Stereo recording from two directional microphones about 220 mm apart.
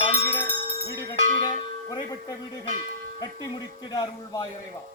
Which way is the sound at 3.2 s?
20° left (ahead or behind).